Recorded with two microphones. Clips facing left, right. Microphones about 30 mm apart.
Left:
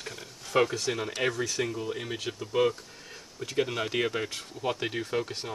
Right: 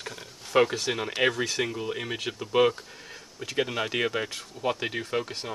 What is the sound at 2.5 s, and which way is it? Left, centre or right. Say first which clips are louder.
Speech: right 4 dB; right.